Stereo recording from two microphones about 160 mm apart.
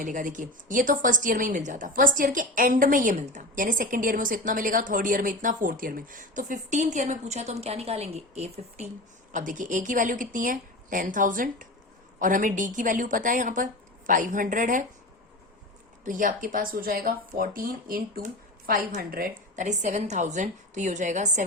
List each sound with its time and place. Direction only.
0.0 s a woman's voice: 55° right (ahead or behind)
9.3 s a woman's voice: 55° right (ahead or behind)
16.0 s a woman's voice: 55° right (ahead or behind)
19.5 s a woman's voice: 50° right (ahead or behind)